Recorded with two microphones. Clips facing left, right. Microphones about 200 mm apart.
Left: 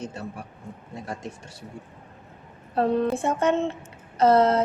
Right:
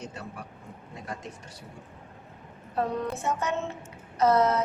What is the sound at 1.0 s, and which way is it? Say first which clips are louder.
Speech: left 3 dB; 25° left (ahead or behind).